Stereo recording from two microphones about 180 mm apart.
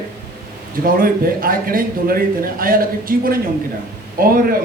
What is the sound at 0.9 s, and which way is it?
Speech, 55° right (ahead or behind).